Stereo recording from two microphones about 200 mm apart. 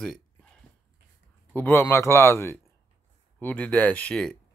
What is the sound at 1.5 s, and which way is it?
Speech, 10° left (ahead or behind).